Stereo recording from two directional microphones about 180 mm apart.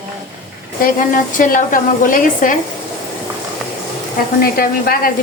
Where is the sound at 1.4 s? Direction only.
50° left (ahead or behind).